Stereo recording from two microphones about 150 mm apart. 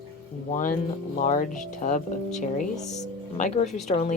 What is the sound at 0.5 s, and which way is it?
Speech, 65° left (ahead or behind).